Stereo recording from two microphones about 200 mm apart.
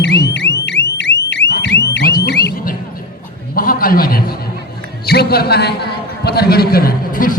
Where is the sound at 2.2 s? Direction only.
55° left (ahead or behind).